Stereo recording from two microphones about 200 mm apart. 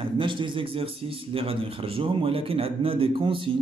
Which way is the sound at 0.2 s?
25° right (ahead or behind).